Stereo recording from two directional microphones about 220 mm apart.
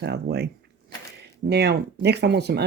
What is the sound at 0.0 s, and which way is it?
Speech, 50° right (ahead or behind).